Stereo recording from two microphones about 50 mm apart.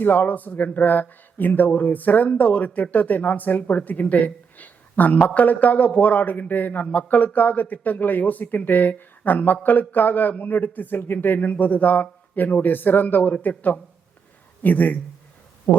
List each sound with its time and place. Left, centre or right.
0.0 s speech: left